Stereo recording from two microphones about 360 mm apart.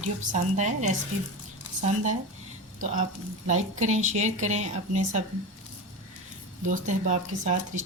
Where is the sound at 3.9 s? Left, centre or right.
Centre.